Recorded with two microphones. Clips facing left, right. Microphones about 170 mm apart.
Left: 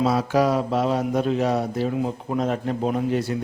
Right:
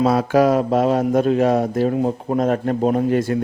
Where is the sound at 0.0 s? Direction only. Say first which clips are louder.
Right 5 dB; 55° right (ahead or behind).